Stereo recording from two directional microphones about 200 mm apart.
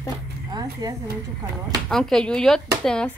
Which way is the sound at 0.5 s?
20° right (ahead or behind).